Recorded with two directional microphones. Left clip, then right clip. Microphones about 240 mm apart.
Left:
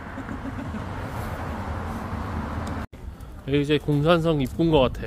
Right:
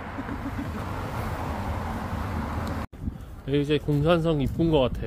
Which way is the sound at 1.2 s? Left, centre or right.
Right.